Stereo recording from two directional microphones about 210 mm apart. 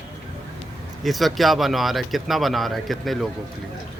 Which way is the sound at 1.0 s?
Centre (ahead or behind).